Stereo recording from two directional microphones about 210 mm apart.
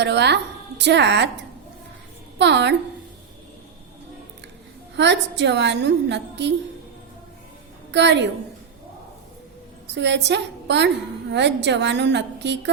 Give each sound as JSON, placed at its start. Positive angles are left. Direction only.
{"t": 0.0, "sound": "a woman's voice", "side_deg": -55}
{"t": 2.4, "sound": "a woman's voice", "side_deg": -55}
{"t": 4.9, "sound": "a woman's voice", "side_deg": -55}
{"t": 7.9, "sound": "a woman's voice", "side_deg": -55}
{"t": 9.9, "sound": "a woman's voice", "side_deg": -55}